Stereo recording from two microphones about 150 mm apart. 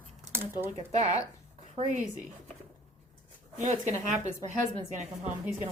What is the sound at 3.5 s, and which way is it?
Speech, 50° right (ahead or behind).